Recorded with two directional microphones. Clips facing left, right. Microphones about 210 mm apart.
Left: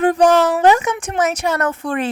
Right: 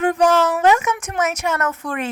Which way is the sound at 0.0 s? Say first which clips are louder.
Left 3 dB; 35° left (ahead or behind).